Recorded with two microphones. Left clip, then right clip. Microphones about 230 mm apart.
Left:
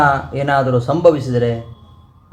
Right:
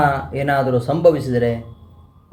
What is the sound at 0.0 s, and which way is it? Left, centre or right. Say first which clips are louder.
Speech: left 3 dB; right.